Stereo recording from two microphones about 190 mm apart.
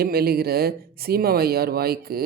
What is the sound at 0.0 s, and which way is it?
Speech, 55° right (ahead or behind).